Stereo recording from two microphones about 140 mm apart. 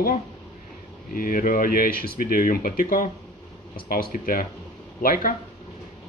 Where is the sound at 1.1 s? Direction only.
90° left.